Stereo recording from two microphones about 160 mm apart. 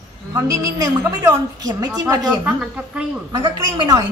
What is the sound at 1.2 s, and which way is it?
Speech, 20° right (ahead or behind).